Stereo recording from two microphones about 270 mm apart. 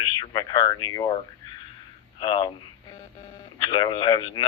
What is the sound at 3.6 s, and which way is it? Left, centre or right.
Speech, centre.